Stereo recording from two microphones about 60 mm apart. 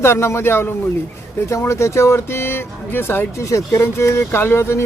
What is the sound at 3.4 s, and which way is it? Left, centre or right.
Speech, left.